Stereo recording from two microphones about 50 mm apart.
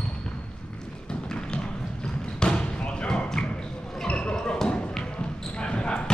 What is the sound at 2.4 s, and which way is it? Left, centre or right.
Thump, centre.